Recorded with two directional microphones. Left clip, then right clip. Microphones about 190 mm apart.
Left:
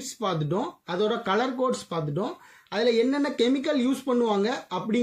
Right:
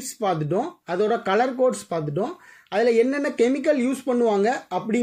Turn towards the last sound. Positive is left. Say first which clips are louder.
# right 3 dB
turn(degrees=-15)  # may be behind; listen again after turning